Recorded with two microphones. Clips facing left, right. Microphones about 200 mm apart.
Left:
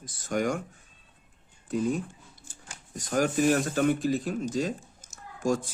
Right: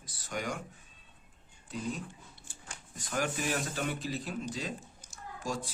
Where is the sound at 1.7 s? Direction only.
50° left (ahead or behind).